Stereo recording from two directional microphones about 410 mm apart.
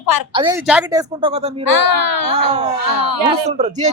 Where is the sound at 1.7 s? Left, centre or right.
Left.